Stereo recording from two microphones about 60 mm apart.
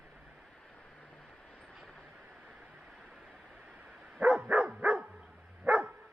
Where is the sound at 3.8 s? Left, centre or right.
Centre.